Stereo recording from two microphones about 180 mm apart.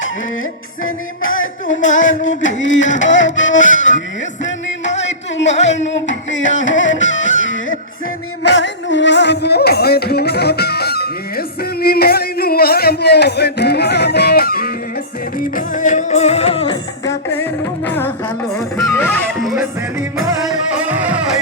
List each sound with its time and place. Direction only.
0.9 s music: 90° left
4.9 s a sound: 85° left
5.5 s a sound: 40° left (ahead or behind)
5.9 s music: 90° left; by 16.7 s 30° left (ahead or behind)
17.2 s music: 10° left (ahead or behind)
20.7 s music: 10° right (ahead or behind)